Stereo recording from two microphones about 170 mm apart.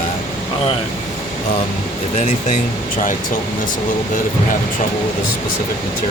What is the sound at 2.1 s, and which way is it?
Speech, 45° left (ahead or behind).